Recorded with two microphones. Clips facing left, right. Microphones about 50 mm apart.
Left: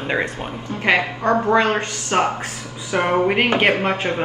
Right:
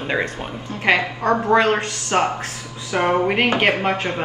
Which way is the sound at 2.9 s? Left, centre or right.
Left.